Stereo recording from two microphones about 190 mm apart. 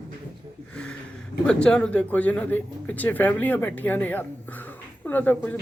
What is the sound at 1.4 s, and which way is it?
Speech, 5° left (ahead or behind).